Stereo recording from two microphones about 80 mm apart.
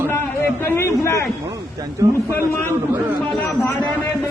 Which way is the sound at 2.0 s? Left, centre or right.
Right.